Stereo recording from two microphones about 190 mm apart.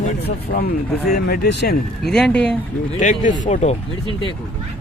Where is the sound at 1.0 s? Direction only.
55° left (ahead or behind).